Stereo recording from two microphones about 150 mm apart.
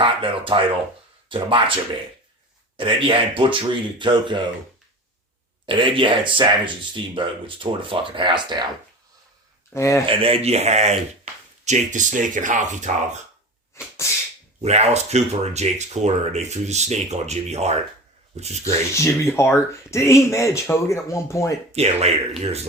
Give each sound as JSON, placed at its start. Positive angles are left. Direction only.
{"t": 0.0, "sound": "speech", "side_deg": -35}
{"t": 2.7, "sound": "speech", "side_deg": -35}
{"t": 5.6, "sound": "speech", "side_deg": -35}
{"t": 9.7, "sound": "speech", "side_deg": 20}
{"t": 10.1, "sound": "speech", "side_deg": -40}
{"t": 13.7, "sound": "sneeze", "side_deg": 15}
{"t": 14.6, "sound": "speech", "side_deg": -45}
{"t": 18.6, "sound": "speech", "side_deg": 20}
{"t": 21.7, "sound": "speech", "side_deg": -45}